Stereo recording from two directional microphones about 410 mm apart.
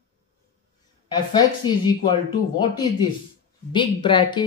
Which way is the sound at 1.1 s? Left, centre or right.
Centre.